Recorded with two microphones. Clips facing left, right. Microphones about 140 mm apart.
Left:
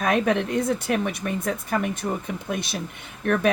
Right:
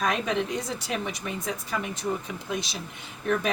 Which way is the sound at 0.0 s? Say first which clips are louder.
Left 5 dB; 55° left (ahead or behind).